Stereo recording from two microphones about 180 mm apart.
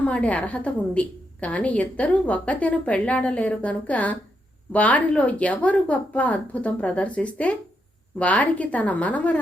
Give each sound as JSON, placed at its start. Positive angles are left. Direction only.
{"t": 0.0, "sound": "a woman's voice", "side_deg": 5}